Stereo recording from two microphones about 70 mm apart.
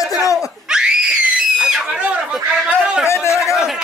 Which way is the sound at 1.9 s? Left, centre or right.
Right.